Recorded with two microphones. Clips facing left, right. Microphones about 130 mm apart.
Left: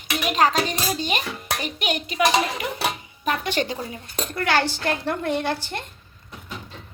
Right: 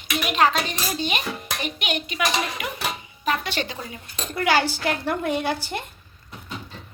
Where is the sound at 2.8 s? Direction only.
50° left (ahead or behind).